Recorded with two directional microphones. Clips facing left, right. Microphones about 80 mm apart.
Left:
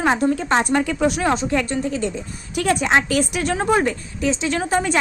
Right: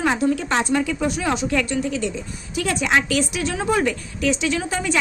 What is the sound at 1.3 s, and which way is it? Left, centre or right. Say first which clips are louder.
A woman's voice: left 2 dB; left.